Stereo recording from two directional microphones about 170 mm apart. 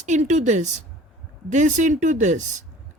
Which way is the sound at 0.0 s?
45° right (ahead or behind).